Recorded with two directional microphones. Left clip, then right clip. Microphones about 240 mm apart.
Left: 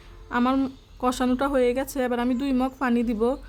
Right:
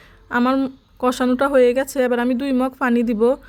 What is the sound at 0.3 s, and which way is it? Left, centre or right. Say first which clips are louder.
A woman's voice: right 5 dB; centre.